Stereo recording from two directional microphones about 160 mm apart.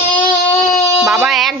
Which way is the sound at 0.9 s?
Centre (ahead or behind).